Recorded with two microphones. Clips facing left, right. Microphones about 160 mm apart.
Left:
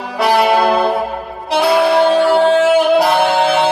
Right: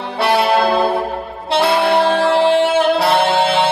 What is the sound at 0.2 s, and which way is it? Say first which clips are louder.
Brass instrument: left 2 dB; centre (ahead or behind).